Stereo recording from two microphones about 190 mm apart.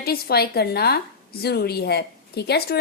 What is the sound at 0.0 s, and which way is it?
Speech, 55° left (ahead or behind).